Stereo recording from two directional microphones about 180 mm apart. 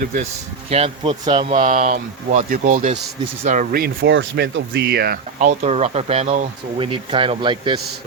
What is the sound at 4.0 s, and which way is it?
Speech, 90° right.